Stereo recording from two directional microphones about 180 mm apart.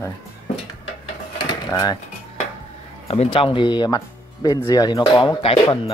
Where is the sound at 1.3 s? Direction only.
20° left (ahead or behind).